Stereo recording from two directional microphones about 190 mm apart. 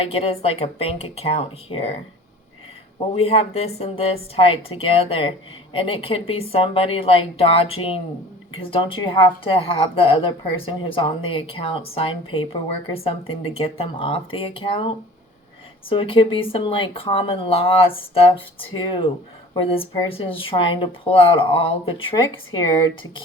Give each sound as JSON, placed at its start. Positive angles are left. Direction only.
{"t": 0.0, "sound": "a woman's voice", "side_deg": 30}
{"t": 3.1, "sound": "a woman's voice", "side_deg": 30}